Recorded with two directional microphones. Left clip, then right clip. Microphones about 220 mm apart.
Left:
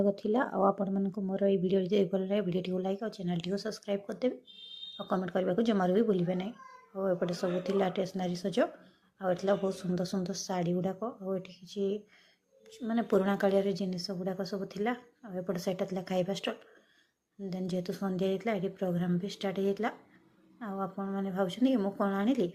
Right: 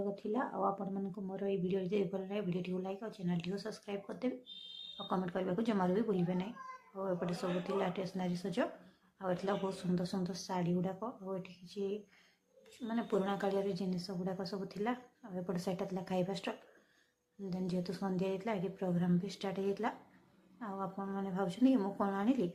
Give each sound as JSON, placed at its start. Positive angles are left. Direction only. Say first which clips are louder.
{"t": 0.0, "sound": "a woman's voice", "louder": "left 8 dB", "side_deg": 25}